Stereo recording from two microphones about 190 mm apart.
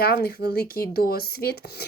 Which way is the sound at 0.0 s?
55° left (ahead or behind).